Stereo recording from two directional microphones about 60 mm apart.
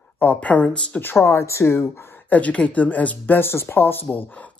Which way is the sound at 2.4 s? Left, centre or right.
Left.